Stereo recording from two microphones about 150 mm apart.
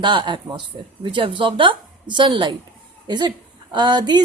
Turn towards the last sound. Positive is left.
turn(degrees=-30)  # may be behind; listen again after turning